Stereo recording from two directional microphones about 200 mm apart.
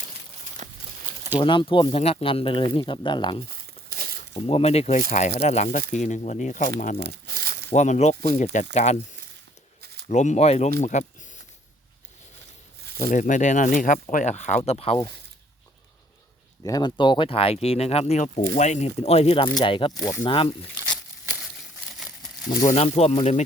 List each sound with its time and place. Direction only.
1.4 s speech: 25° left (ahead or behind)
3.5 s crumpling: 45° right (ahead or behind)
4.4 s speech: 30° left (ahead or behind)
7.0 s crumpling: 50° right (ahead or behind)
7.7 s speech: 35° left (ahead or behind)
10.1 s speech: 35° left (ahead or behind)
13.0 s speech: 40° left (ahead or behind)
16.6 s speech: 20° left (ahead or behind)
22.6 s speech: 30° left (ahead or behind)